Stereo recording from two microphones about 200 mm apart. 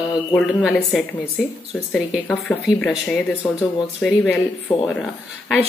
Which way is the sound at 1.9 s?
Centre (ahead or behind).